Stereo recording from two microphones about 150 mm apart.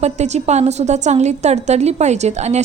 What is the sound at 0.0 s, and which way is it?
A woman's voice, 50° right (ahead or behind).